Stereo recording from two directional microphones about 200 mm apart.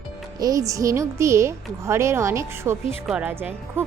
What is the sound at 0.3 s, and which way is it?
Speech, 15° right (ahead or behind).